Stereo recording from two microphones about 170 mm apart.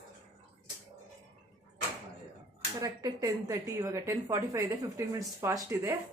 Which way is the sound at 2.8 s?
20° right (ahead or behind).